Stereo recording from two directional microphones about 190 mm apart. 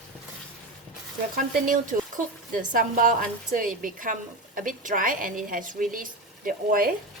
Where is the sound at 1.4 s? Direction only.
45° right (ahead or behind).